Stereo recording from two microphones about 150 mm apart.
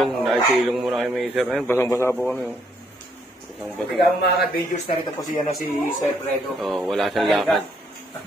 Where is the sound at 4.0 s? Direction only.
90° left.